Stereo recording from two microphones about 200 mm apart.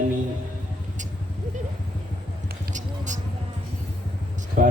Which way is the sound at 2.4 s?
45° right (ahead or behind).